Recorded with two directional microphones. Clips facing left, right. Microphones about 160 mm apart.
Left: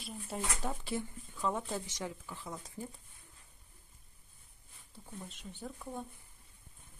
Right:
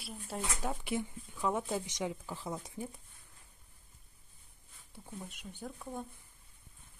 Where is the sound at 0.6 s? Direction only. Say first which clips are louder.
Right 2 dB; 15° right (ahead or behind).